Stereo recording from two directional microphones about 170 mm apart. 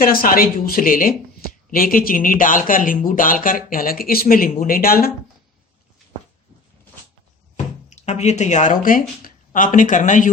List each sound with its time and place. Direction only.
0.0 s speech: 60° left (ahead or behind)
7.9 s speech: 40° left (ahead or behind)